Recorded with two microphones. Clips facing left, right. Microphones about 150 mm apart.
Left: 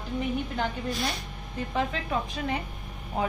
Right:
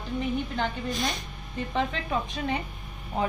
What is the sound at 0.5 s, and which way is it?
A woman's voice, 5° left (ahead or behind).